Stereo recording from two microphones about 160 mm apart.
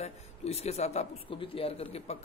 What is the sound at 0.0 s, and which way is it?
A man's voice, 40° left (ahead or behind).